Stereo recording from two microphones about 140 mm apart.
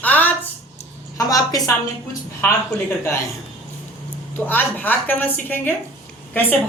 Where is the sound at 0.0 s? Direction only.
10° left (ahead or behind).